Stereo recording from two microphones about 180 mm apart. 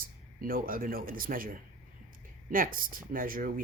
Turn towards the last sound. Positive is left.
turn(degrees=-50)  # may be behind; listen again after turning